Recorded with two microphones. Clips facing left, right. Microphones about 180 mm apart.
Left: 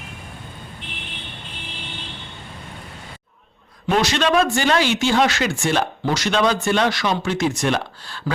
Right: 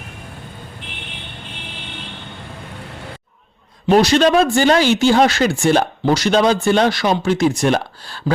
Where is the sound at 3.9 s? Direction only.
35° right (ahead or behind).